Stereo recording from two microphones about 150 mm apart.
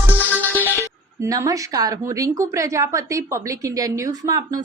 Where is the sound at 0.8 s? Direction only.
20° right (ahead or behind).